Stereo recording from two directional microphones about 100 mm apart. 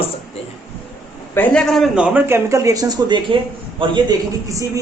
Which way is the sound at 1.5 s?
5° left (ahead or behind).